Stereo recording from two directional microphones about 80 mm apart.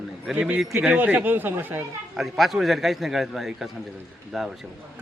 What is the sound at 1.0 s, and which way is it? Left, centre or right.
Speech, right.